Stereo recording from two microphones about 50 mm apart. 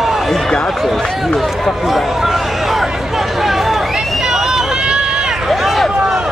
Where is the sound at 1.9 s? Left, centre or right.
Centre.